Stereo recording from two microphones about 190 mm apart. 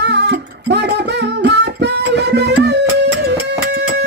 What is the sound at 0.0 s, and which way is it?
Music, 65° right (ahead or behind).